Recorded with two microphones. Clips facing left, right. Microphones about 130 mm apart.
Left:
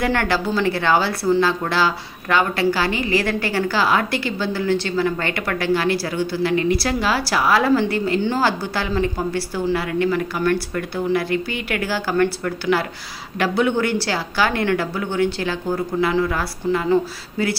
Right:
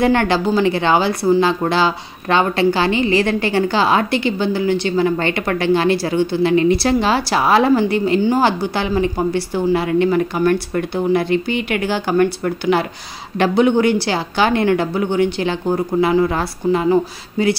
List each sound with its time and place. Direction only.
0.0 s speech: 20° right (ahead or behind)